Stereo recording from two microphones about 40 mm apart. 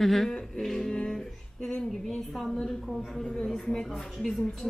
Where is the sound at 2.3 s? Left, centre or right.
Centre.